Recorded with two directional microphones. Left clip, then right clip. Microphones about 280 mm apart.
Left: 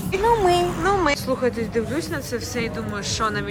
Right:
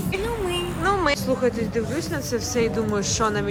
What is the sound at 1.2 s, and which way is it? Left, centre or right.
Speech, centre.